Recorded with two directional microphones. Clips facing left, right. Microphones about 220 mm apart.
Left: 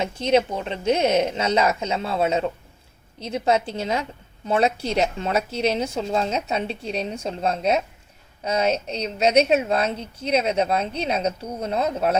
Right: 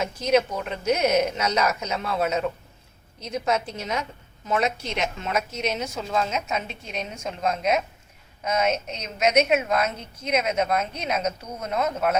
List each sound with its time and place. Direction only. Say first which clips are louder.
0.0 s a woman's voice: left 1 dB; 30° left (ahead or behind)